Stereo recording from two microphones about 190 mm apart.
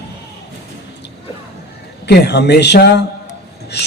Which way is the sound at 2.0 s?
60° left (ahead or behind).